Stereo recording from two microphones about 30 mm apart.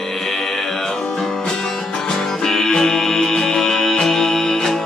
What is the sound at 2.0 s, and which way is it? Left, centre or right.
Music, centre.